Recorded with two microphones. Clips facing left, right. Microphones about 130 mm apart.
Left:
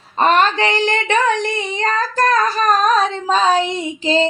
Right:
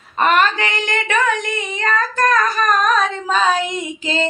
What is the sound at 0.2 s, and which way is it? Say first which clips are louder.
Child singing: left 2 dB; 30° left (ahead or behind).